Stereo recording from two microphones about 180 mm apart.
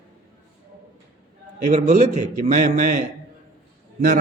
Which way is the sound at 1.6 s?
40° right (ahead or behind).